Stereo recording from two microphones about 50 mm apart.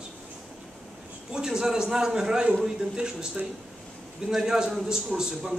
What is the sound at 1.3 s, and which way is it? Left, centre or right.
A man's voice, centre.